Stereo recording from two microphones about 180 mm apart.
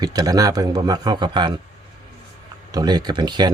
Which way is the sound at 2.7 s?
20° right (ahead or behind).